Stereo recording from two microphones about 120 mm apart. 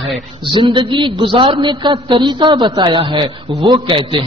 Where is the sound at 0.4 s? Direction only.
45° right (ahead or behind).